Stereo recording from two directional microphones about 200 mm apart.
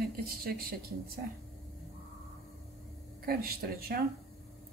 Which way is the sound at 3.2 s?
45° right (ahead or behind).